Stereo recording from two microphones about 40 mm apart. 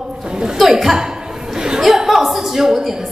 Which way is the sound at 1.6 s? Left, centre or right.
Centre.